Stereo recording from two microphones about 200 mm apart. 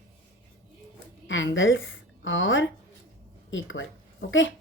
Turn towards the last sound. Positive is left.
turn(degrees=70)  # may be behind; listen again after turning